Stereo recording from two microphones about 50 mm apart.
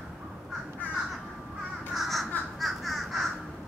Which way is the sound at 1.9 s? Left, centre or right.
Centre.